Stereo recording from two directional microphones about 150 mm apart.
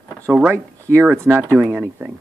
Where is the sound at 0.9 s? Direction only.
15° right (ahead or behind).